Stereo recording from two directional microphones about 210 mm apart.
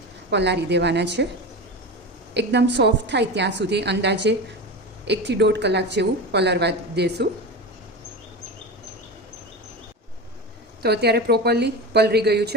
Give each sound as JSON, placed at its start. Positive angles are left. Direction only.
{"t": 0.3, "sound": "a woman's voice", "side_deg": -55}
{"t": 2.3, "sound": "a woman's voice", "side_deg": -55}
{"t": 10.8, "sound": "a woman's voice", "side_deg": -50}